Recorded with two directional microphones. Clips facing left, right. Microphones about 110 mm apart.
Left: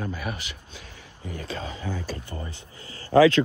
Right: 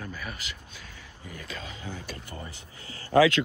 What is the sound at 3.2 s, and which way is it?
Speech, 35° left (ahead or behind).